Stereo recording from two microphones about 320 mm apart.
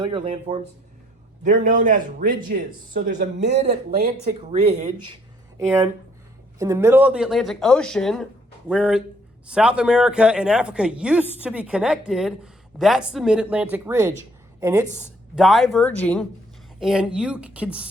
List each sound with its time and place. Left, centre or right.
0.0 s a man's voice: centre
5.5 s speech: centre
14.2 s a sound: centre
14.9 s speech: centre